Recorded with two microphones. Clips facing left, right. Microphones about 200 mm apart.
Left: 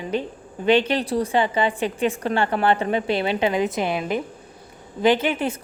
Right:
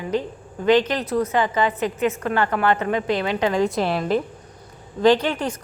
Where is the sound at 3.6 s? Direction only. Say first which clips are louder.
Right 2 dB; centre (ahead or behind).